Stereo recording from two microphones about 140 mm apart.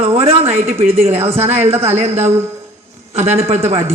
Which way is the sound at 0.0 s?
45° right (ahead or behind).